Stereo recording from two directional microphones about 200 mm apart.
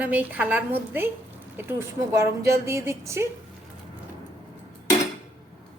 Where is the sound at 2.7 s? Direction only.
15° right (ahead or behind).